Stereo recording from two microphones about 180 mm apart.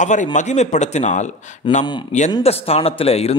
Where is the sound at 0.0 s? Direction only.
40° left (ahead or behind).